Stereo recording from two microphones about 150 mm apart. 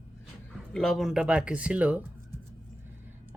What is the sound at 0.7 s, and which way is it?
Speech, centre (ahead or behind).